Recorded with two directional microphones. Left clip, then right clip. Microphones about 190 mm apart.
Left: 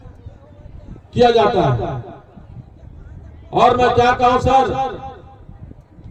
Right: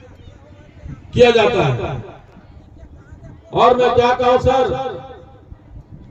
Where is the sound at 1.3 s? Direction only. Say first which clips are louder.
Even; 50° left (ahead or behind).